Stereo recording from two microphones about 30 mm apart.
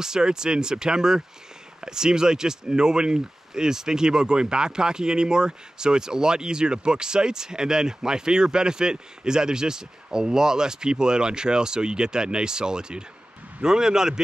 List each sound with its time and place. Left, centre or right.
0.0 s speech: right